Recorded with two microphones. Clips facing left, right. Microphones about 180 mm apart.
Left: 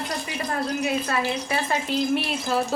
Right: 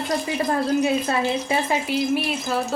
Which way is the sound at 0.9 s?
25° right (ahead or behind).